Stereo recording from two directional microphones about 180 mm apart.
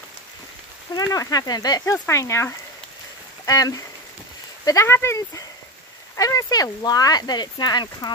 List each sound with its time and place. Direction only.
0.9 s speech: 20° left (ahead or behind)